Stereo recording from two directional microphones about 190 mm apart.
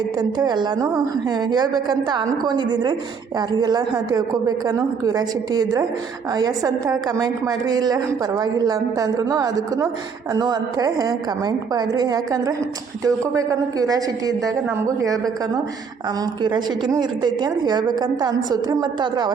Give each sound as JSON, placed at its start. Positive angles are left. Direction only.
{"t": 0.2, "sound": "a woman's voice", "side_deg": -25}
{"t": 16.4, "sound": "a woman's voice", "side_deg": -25}